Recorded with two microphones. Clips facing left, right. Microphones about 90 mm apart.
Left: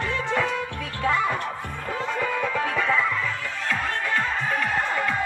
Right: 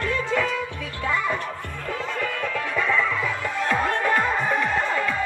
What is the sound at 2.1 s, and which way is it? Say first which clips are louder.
Music: left 3 dB; 10° left (ahead or behind).